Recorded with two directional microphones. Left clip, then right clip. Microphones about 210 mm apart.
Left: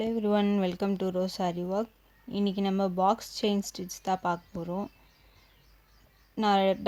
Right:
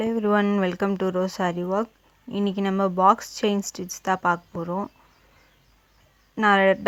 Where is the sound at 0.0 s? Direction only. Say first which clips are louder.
Right 6 dB; 5° right (ahead or behind).